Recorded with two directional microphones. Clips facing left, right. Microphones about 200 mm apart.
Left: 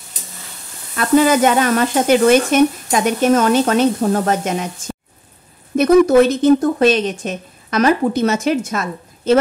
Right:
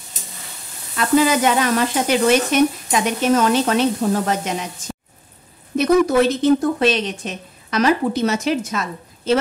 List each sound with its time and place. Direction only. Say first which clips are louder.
0.9 s speech: left 3 dB; 50° left (ahead or behind)
5.8 s speech: left 5 dB; 45° left (ahead or behind)